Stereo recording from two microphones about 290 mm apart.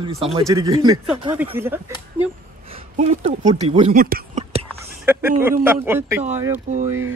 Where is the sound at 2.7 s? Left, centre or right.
Right.